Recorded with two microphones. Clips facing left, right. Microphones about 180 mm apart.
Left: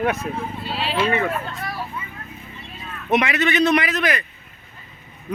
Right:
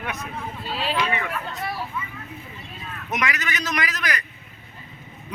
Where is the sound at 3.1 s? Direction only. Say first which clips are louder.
Left 9 dB; 30° left (ahead or behind).